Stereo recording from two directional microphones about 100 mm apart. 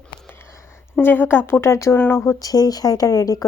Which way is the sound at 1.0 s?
20° left (ahead or behind).